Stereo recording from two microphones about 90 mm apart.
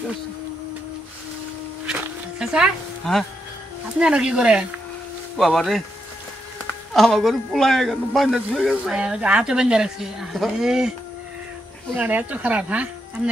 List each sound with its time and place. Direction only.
2.3 s speech: 5° right (ahead or behind)
5.4 s a man's voice: centre (ahead or behind)
6.9 s a man's voice: 5° left (ahead or behind)
8.9 s speech: 10° right (ahead or behind)
11.9 s speech: 20° right (ahead or behind)